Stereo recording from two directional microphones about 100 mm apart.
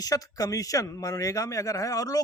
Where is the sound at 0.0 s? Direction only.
35° left (ahead or behind).